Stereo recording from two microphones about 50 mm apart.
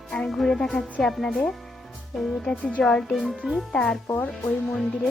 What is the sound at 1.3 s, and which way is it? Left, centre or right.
Speech, centre.